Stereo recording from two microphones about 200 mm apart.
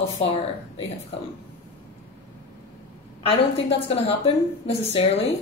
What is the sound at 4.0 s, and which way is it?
A woman's voice, 30° left (ahead or behind).